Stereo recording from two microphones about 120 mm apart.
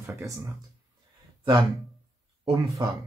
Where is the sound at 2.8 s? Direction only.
40° right (ahead or behind).